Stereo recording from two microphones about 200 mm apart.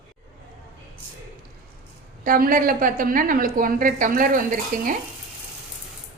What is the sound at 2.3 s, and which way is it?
A woman's voice, 45° right (ahead or behind).